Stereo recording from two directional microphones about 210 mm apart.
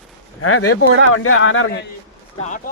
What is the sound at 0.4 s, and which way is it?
Speech, 90° left.